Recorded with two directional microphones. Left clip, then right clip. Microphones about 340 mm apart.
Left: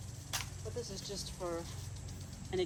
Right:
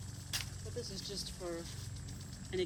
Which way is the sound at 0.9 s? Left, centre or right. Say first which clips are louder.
Even; centre.